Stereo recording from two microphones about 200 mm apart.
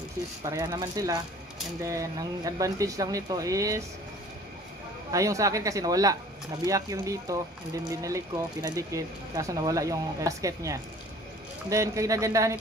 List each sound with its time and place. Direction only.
0.4 s speech: 20° right (ahead or behind)
5.1 s speech: 15° right (ahead or behind)